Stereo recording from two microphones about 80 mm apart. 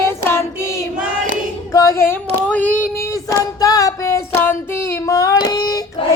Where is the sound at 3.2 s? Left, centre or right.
Left.